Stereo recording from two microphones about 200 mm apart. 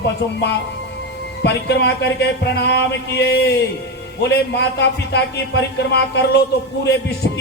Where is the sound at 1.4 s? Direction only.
60° left (ahead or behind).